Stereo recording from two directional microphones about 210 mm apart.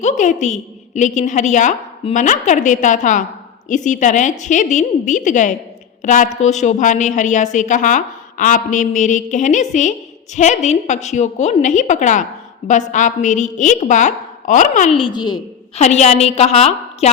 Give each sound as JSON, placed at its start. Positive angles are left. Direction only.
{"t": 0.0, "sound": "a woman's voice", "side_deg": 35}
{"t": 14.9, "sound": "a woman's voice", "side_deg": 20}
{"t": 15.8, "sound": "a woman's voice", "side_deg": 30}